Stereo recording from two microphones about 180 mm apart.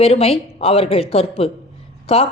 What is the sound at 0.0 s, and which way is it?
A woman's voice, 35° left (ahead or behind).